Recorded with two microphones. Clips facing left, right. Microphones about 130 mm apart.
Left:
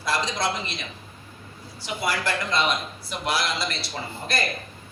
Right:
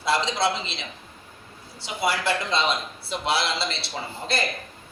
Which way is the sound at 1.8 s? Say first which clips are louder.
Right 2 dB; 25° right (ahead or behind).